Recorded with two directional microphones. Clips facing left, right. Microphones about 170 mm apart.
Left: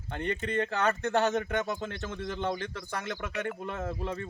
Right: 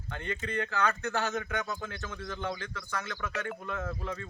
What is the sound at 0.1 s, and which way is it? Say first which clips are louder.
Speech: left 4 dB; 25° left (ahead or behind).